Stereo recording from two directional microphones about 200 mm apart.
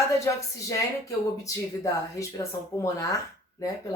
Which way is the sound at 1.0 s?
15° left (ahead or behind).